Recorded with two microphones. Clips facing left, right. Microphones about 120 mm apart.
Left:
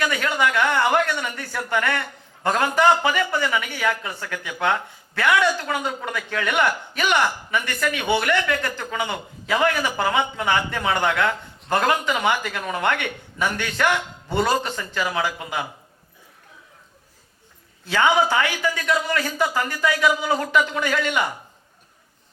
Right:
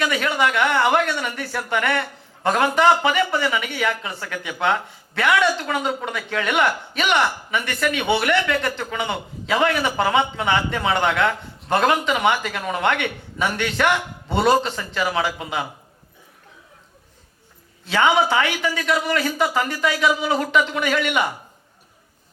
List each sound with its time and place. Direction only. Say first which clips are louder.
0.0 s a man's voice: right 1 dB; 20° right (ahead or behind)
17.8 s a man's voice: right 1 dB; 20° right (ahead or behind)